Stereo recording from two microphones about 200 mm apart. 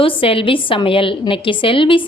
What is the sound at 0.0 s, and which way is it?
A woman's voice, 25° left (ahead or behind).